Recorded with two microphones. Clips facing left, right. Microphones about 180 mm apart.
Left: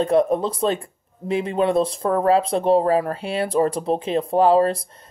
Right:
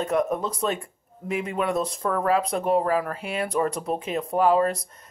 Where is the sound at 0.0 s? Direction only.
30° left (ahead or behind).